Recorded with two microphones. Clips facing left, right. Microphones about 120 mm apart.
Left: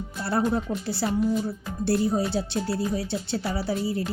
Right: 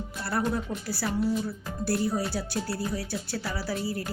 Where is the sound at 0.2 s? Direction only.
25° left (ahead or behind).